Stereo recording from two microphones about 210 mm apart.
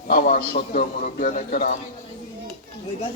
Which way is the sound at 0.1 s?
45° left (ahead or behind).